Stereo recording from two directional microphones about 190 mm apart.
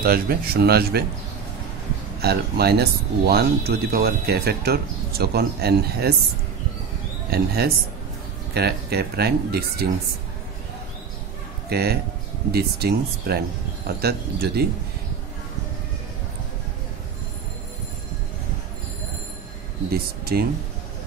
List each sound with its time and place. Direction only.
0.0 s speech: 50° right (ahead or behind)
2.1 s speech: 55° right (ahead or behind)
7.2 s speech: 55° right (ahead or behind)
11.7 s speech: 55° right (ahead or behind)
19.9 s speech: 55° right (ahead or behind)